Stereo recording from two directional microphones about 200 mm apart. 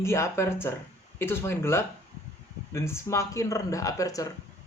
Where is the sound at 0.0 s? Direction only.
15° left (ahead or behind).